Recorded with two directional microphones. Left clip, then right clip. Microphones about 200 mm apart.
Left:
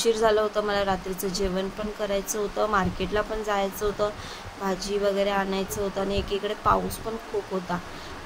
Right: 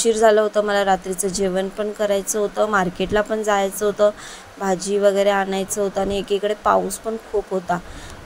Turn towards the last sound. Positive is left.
turn(degrees=-30)  # may be behind; listen again after turning